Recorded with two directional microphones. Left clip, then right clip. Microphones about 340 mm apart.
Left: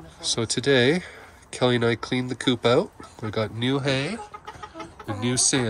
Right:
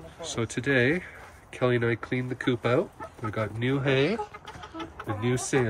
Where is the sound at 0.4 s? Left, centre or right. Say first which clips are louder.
Left 4 dB; centre.